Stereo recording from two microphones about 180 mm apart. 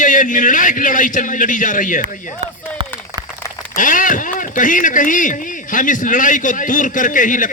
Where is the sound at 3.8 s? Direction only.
45° left (ahead or behind).